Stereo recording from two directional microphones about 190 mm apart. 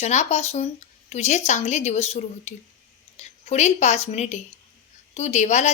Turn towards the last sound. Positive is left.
turn(degrees=35)  # may be behind; listen again after turning